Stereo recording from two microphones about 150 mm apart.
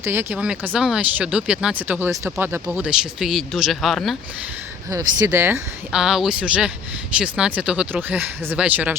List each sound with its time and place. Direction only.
0.0 s speech: 15° right (ahead or behind)
2.7 s speech: 5° right (ahead or behind)
4.9 s speech: 20° right (ahead or behind)
5.9 s speech: 5° right (ahead or behind)